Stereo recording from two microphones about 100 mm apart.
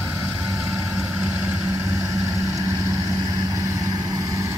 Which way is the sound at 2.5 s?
40° right (ahead or behind).